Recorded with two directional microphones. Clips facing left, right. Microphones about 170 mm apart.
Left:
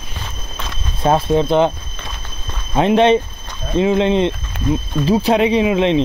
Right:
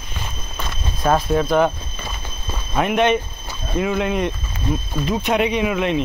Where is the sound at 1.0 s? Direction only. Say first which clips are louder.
Left 3 dB; 25° left (ahead or behind).